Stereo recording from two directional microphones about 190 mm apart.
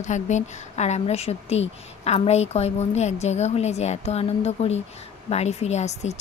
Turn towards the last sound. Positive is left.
turn(degrees=35)  # may be behind; listen again after turning